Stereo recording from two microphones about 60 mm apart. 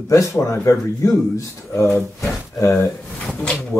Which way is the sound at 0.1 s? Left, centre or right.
Left.